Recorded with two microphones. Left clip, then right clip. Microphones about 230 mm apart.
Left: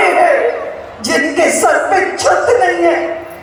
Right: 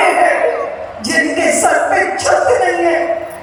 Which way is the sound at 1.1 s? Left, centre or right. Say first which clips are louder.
Left 1 dB; left.